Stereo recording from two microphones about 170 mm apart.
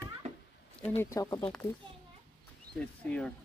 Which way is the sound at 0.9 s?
15° left (ahead or behind).